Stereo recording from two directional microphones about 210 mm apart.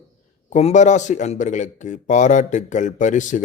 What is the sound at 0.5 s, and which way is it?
A man's voice, 35° left (ahead or behind).